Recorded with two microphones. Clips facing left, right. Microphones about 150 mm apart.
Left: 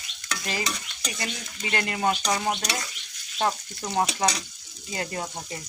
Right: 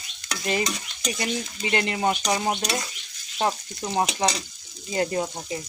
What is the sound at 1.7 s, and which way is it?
Stir, 25° right (ahead or behind).